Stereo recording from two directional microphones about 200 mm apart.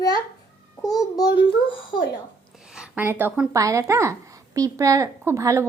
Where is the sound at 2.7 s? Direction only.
5° right (ahead or behind).